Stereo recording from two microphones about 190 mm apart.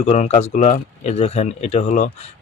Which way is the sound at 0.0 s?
35° left (ahead or behind).